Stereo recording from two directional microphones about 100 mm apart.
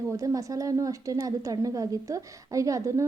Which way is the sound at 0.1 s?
30° right (ahead or behind).